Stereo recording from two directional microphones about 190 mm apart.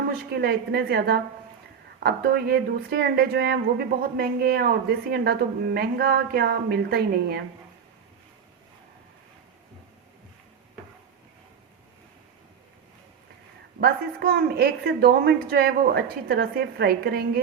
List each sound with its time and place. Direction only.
0.1 s speech: 55° right (ahead or behind)
13.7 s speech: 55° right (ahead or behind)